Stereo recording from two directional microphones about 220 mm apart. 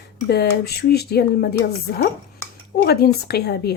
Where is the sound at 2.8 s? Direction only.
45° left (ahead or behind).